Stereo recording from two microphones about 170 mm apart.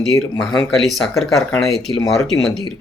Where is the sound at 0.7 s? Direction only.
Centre (ahead or behind).